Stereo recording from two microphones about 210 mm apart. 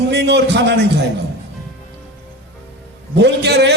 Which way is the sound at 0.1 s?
55° right (ahead or behind).